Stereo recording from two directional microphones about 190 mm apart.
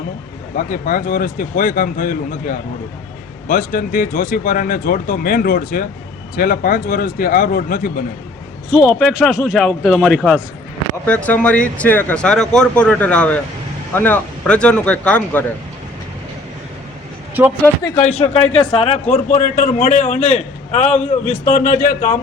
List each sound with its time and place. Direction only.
0.5 s speech: 45° left (ahead or behind)
8.8 s a man's voice: 5° left (ahead or behind)
18.0 s a man's voice: 35° left (ahead or behind)
19.3 s a man's voice: 45° left (ahead or behind)
20.9 s speech: 10° left (ahead or behind)
21.4 s speech: 45° left (ahead or behind)